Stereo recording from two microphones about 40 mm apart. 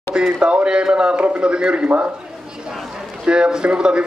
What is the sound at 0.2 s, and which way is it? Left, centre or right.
Speech, right.